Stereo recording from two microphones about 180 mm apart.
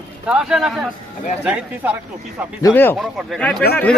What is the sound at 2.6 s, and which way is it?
Speech, 15° left (ahead or behind).